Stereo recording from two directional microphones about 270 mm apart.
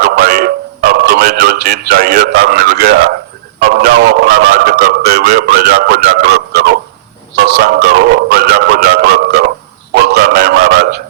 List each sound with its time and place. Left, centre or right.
0.0 s speech: right